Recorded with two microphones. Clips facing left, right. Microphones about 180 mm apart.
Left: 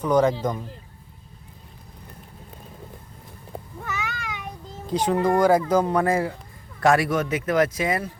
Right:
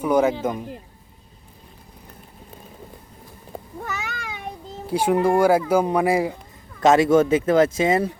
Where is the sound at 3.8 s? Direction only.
30° right (ahead or behind).